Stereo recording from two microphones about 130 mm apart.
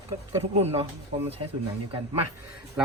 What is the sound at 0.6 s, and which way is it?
Speech, 50° right (ahead or behind).